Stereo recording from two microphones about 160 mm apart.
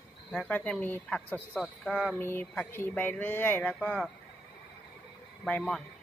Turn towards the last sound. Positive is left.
turn(degrees=5)  # may be behind; listen again after turning